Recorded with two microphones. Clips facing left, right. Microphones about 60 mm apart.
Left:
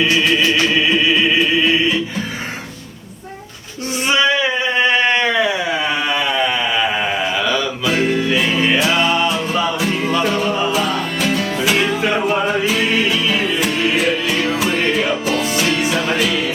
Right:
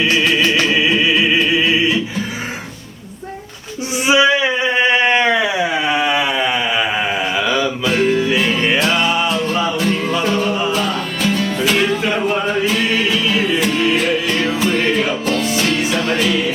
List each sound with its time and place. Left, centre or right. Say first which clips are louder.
0.0 s music: even; centre
4.0 s a sound: right 3 dB; centre
7.9 s music: right 1 dB; centre